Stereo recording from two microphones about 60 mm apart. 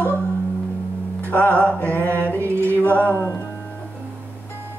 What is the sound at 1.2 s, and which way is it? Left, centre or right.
Music, left.